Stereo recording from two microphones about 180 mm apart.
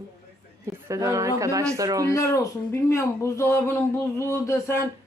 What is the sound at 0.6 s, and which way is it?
A woman's voice, 15° right (ahead or behind).